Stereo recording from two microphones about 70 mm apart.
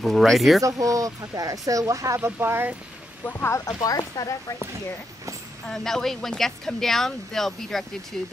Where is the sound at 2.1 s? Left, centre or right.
Right.